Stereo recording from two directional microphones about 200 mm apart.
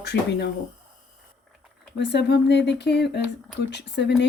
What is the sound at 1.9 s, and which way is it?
Speech, 60° left (ahead or behind).